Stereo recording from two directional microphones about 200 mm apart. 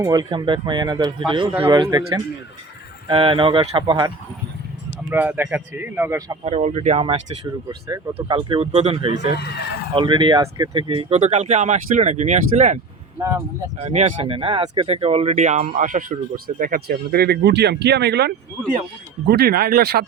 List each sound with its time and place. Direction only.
0.0 s speech: 20° right (ahead or behind)
5.0 s speech: 10° right (ahead or behind)
6.4 s speech: 35° right (ahead or behind)
13.1 s speech: 15° right (ahead or behind)
13.7 s speech: 35° right (ahead or behind); by 20.1 s 50° right (ahead or behind)